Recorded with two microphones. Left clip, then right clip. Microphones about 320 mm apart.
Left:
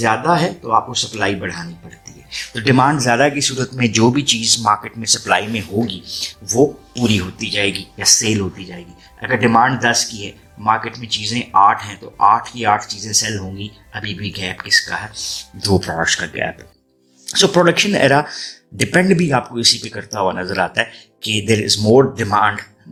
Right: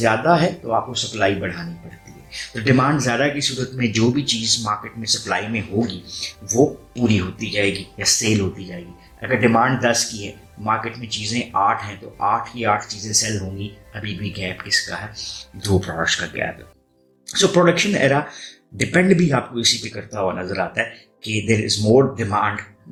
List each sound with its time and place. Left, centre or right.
0.0 s speech: left